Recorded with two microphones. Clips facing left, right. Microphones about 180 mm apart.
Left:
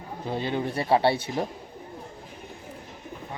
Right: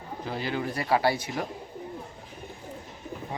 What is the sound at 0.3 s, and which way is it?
Speech, 25° left (ahead or behind).